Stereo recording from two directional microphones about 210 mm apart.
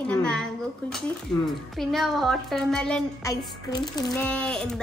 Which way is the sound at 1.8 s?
Centre (ahead or behind).